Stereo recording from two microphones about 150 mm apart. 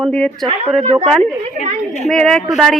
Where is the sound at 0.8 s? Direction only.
45° right (ahead or behind).